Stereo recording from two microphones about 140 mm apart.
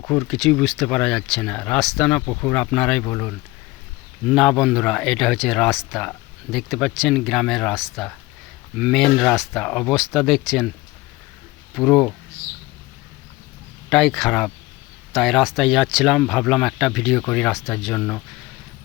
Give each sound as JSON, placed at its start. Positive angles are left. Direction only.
{"t": 0.0, "sound": "speech", "side_deg": 20}
{"t": 0.3, "sound": "speech", "side_deg": 0}
{"t": 4.3, "sound": "speech", "side_deg": 0}
{"t": 11.7, "sound": "speech", "side_deg": 0}
{"t": 13.9, "sound": "speech", "side_deg": 0}